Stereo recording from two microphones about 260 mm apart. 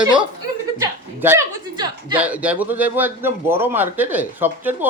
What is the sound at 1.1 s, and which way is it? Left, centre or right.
A man's voice, centre.